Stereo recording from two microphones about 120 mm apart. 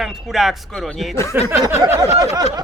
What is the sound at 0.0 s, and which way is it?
Speech, 5° right (ahead or behind).